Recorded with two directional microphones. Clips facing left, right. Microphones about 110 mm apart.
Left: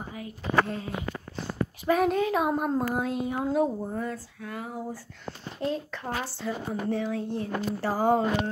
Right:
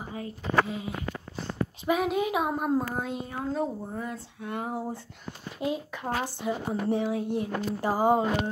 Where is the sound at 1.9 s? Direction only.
15° right (ahead or behind).